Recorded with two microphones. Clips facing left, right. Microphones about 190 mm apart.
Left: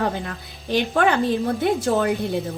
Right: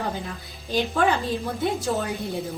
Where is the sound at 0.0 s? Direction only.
65° left (ahead or behind).